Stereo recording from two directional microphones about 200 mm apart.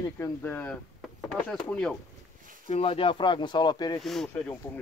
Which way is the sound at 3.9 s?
Centre (ahead or behind).